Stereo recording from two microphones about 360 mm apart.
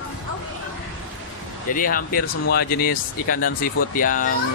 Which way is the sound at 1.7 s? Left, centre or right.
Left.